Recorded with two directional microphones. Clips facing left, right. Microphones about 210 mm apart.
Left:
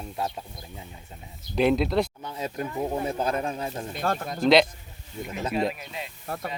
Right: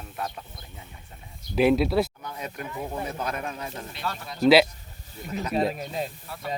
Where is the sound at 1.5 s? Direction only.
5° right (ahead or behind).